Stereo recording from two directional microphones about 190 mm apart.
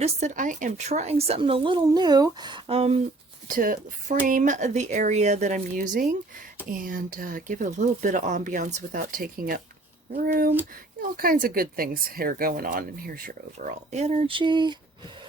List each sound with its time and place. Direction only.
0.0 s a woman's voice: 40° right (ahead or behind)
3.5 s a woman's voice: 45° right (ahead or behind)
11.2 s speech: 50° right (ahead or behind); by 14.8 s 25° right (ahead or behind)